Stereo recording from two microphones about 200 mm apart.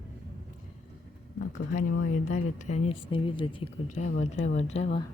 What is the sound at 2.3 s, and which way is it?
Speech, 35° left (ahead or behind).